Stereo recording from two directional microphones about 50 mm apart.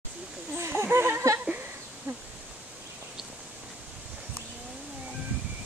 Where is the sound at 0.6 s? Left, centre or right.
Right.